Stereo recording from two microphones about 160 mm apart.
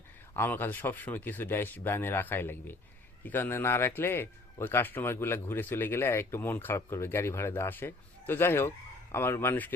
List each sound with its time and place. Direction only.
0.3 s a man's voice: 15° left (ahead or behind)